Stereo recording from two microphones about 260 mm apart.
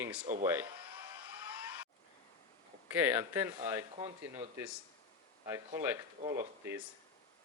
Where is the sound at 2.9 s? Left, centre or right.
Centre.